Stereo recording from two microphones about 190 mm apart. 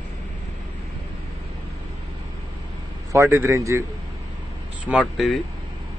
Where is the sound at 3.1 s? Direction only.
15° right (ahead or behind).